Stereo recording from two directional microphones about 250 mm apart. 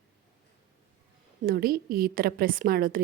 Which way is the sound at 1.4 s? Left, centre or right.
Right.